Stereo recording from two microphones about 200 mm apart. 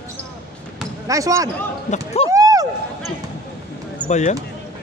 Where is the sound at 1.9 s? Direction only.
30° left (ahead or behind).